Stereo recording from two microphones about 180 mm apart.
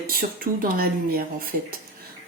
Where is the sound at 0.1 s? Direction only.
55° right (ahead or behind).